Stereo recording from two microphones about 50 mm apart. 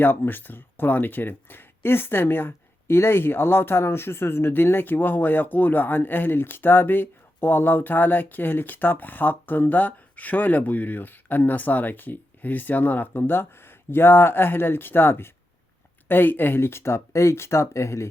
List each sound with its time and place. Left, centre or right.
0.0 s speech: left